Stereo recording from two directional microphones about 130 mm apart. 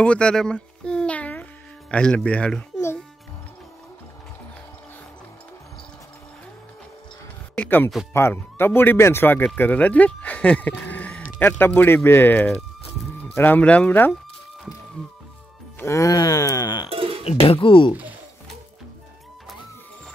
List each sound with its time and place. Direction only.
0.0 s a child's voice: 10° left (ahead or behind)
7.5 s speech: 15° left (ahead or behind)
10.9 s a sound: 10° left (ahead or behind)
11.3 s speech: 15° left (ahead or behind)
15.8 s groan: 25° left (ahead or behind)
16.9 s music: 45° right (ahead or behind)
17.2 s speech: 50° left (ahead or behind)